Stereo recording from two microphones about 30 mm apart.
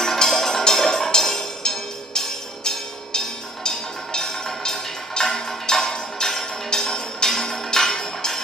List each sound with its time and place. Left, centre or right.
0.0 s music: centre